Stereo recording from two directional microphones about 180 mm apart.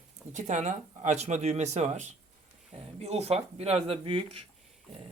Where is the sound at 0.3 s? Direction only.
40° right (ahead or behind).